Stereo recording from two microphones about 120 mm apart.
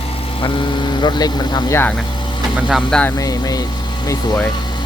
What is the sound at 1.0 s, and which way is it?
Speech, 35° left (ahead or behind).